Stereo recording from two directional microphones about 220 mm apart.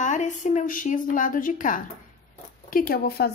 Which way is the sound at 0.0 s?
35° left (ahead or behind).